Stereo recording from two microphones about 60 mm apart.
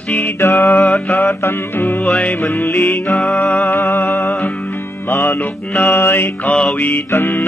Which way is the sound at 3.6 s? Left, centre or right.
Left.